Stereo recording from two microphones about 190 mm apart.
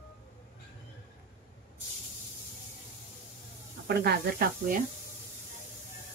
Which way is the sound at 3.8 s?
55° right (ahead or behind).